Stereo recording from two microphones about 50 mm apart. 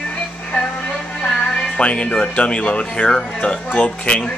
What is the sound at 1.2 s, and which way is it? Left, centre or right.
Music, centre.